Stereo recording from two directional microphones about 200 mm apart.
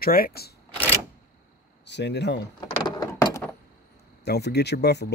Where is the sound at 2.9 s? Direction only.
20° left (ahead or behind).